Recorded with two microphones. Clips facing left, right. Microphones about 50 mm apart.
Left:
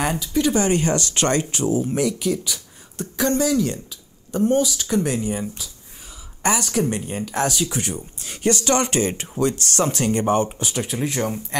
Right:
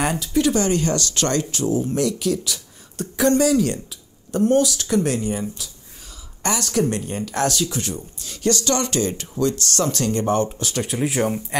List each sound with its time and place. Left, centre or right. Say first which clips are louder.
0.0 s speech: right 1 dB; centre
0.5 s speech: left 2 dB; left
3.2 s speech: right 3 dB; centre
6.4 s speech: even; centre
7.6 s speech: even; left
10.8 s speech: right 3 dB; centre